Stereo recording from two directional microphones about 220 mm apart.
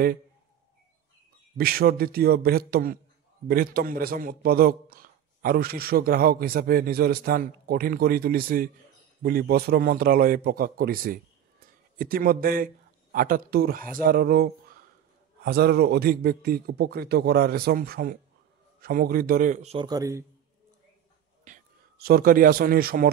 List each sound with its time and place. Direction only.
1.6 s a man's voice: 45° right (ahead or behind); by 20.2 s 15° right (ahead or behind)
21.5 s a man's voice: 40° right (ahead or behind)